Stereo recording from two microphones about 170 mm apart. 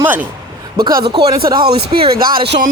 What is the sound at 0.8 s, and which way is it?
Speech, 65° right (ahead or behind).